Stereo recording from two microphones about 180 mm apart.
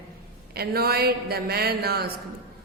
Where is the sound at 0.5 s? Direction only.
60° right (ahead or behind).